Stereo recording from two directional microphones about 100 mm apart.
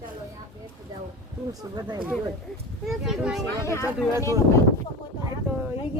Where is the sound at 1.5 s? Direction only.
40° right (ahead or behind).